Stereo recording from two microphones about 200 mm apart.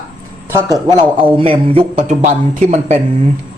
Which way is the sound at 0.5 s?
20° right (ahead or behind).